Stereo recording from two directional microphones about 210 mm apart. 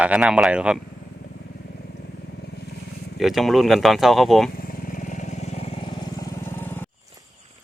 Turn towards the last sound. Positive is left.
turn(degrees=10)  # may be behind; listen again after turning